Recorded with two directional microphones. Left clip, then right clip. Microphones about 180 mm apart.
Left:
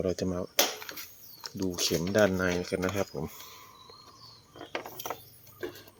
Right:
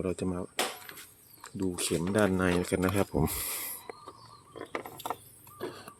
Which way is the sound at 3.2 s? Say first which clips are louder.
Right 8 dB; 65° right (ahead or behind).